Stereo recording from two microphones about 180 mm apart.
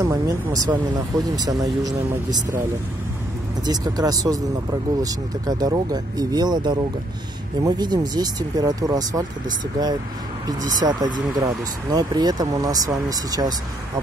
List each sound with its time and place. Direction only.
0.0 s speech: 20° right (ahead or behind)
3.6 s speech: 20° right (ahead or behind)
10.4 s speech: 20° right (ahead or behind)